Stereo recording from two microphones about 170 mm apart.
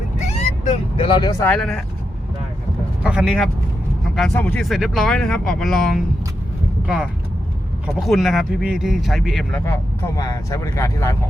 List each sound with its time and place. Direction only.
0.3 s vehicle: 35° left (ahead or behind)
1.4 s speech: 5° left (ahead or behind)
3.0 s speech: 5° right (ahead or behind)
10.2 s speech: 20° left (ahead or behind)